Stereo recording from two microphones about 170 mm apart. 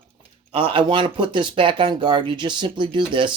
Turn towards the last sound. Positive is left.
turn(degrees=-30)  # may be behind; listen again after turning